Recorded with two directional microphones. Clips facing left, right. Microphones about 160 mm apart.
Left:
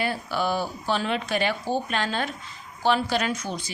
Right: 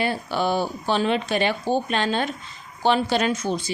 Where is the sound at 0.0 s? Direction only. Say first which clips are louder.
Right 3 dB; 25° right (ahead or behind).